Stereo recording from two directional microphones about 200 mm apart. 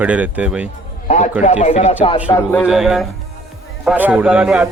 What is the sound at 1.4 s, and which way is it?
Speech, 35° left (ahead or behind).